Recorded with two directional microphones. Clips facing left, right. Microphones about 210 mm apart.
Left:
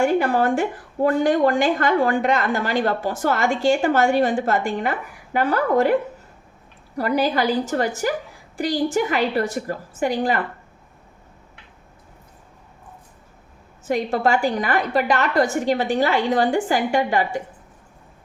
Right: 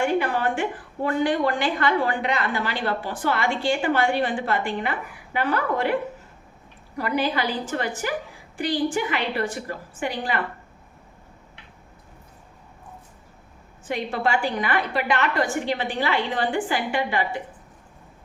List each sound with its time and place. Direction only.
0.0 s a woman's voice: 40° left (ahead or behind)
13.8 s a woman's voice: 40° left (ahead or behind)